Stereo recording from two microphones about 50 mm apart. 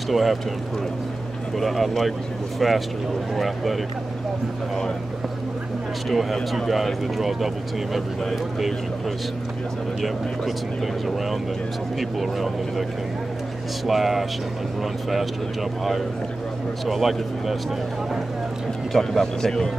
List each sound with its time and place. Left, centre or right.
0.1 s speech: centre
1.6 s speech: centre
6.0 s speech: centre
10.0 s speech: centre
13.8 s speech: centre
16.8 s speech: centre
18.9 s speech: centre